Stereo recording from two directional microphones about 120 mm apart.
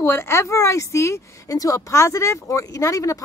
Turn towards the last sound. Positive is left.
turn(degrees=25)  # may be behind; listen again after turning